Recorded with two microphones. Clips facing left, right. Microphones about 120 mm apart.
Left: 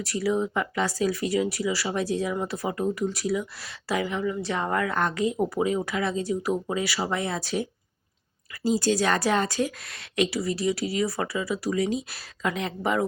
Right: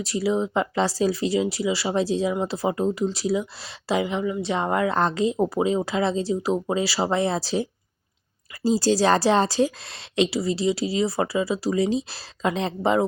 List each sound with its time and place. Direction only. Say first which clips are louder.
0.0 s a woman's voice: right 2 dB; 25° right (ahead or behind)